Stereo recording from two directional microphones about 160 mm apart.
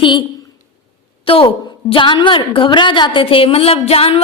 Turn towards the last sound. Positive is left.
turn(degrees=35)  # may be behind; listen again after turning